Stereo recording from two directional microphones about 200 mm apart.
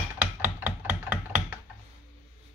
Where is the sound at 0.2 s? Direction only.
10° right (ahead or behind).